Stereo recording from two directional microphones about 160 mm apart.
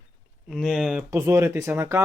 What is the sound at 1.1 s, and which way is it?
Speech, 15° right (ahead or behind).